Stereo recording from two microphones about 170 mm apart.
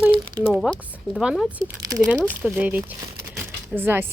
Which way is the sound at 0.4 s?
Centre (ahead or behind).